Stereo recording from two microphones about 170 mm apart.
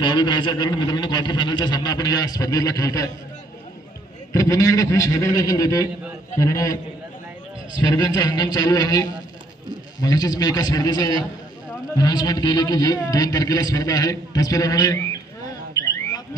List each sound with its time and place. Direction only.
0.0 s a man's voice: 25° left (ahead or behind)
4.3 s a man's voice: 20° left (ahead or behind)
7.9 s a man's voice: 20° left (ahead or behind)